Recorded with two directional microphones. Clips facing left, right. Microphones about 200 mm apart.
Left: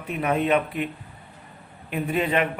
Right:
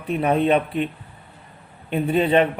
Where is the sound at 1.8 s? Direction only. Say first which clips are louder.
Right 5 dB; 30° right (ahead or behind).